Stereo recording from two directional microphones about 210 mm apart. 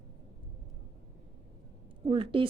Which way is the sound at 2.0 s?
25° right (ahead or behind).